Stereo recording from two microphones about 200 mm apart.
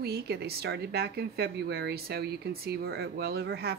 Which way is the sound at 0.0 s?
55° right (ahead or behind).